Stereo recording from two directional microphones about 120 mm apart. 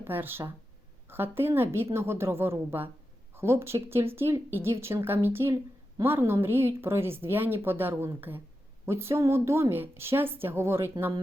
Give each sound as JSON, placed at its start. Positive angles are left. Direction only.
{"t": 0.0, "sound": "speech", "side_deg": -15}